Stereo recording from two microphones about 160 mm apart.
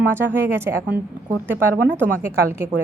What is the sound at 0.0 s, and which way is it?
Speech, 15° right (ahead or behind).